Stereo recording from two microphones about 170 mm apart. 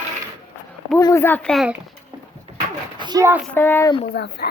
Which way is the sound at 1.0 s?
20° left (ahead or behind).